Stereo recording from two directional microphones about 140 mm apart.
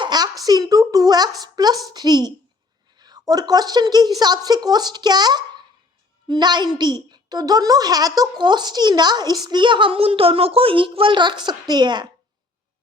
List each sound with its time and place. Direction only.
0.0 s a woman's voice: 30° right (ahead or behind)